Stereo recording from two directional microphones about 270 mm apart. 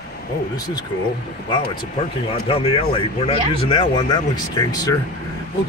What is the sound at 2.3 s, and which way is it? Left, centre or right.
Speech, left.